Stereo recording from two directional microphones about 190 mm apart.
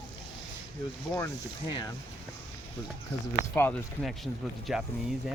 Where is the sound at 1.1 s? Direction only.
20° left (ahead or behind).